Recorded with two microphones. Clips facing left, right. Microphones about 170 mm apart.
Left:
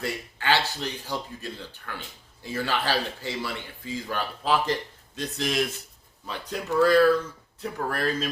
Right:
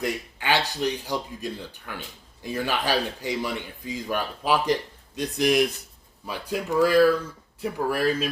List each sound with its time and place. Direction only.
0.0 s speech: 15° right (ahead or behind)